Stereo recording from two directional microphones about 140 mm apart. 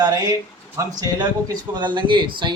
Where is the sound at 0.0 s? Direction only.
30° right (ahead or behind).